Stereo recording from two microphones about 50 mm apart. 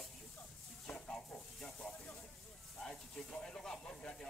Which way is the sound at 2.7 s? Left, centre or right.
Centre.